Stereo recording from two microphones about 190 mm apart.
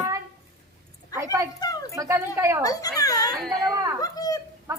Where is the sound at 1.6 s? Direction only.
20° left (ahead or behind).